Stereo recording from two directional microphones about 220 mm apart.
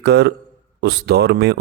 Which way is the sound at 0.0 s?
50° right (ahead or behind).